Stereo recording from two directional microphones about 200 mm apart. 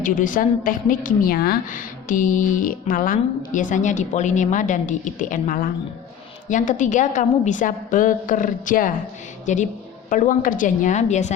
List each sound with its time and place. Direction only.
0.0 s a woman's voice: 40° left (ahead or behind)